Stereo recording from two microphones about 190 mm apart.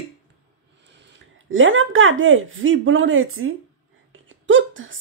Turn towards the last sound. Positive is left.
turn(degrees=-90)